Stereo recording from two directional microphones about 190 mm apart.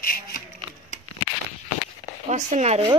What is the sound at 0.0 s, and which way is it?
Wood, 50° left (ahead or behind).